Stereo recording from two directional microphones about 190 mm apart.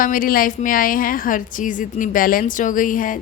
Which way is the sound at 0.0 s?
45° left (ahead or behind).